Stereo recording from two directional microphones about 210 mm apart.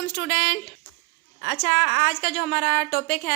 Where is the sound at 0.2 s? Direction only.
40° left (ahead or behind).